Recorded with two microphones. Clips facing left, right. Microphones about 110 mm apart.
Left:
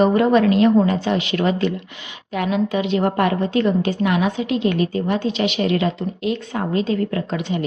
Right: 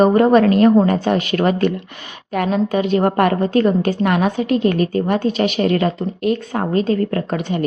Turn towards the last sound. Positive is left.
turn(degrees=-50)  # may be behind; listen again after turning